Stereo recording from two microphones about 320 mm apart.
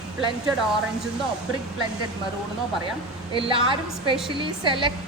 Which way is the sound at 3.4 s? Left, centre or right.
Centre.